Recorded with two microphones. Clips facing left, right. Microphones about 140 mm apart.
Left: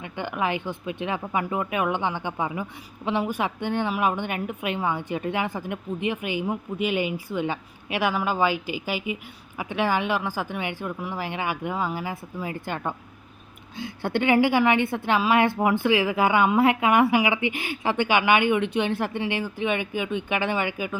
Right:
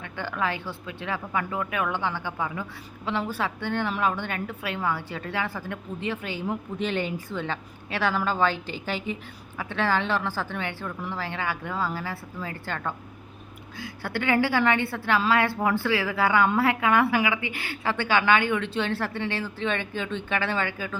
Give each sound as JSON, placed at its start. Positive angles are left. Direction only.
{"t": 0.0, "sound": "speech", "side_deg": 15}